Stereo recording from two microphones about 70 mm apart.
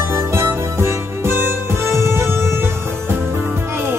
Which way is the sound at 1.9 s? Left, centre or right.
Right.